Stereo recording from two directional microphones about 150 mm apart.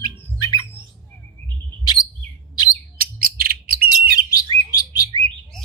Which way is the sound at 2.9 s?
80° right.